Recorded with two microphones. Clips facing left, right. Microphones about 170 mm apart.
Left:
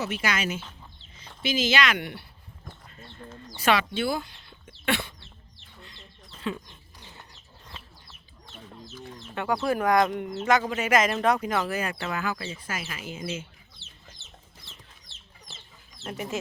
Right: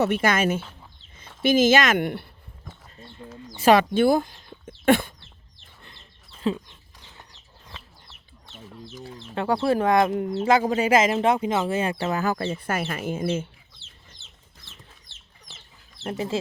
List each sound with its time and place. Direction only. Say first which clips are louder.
0.0 s speech: right 8 dB; 55° right (ahead or behind)
3.3 s speech: right 3 dB; centre (ahead or behind)
3.7 s speech: right 8 dB; 50° right (ahead or behind)
6.5 s speech: right 6 dB; 35° right (ahead or behind)
9.1 s speech: right 4 dB; 30° right (ahead or behind); by 13.5 s 50° right (ahead or behind)
16.0 s speech: right 5 dB; 30° right (ahead or behind)